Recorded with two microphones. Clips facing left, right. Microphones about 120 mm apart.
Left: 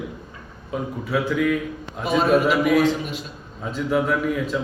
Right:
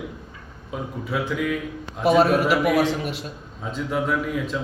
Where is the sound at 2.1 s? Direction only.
65° right (ahead or behind).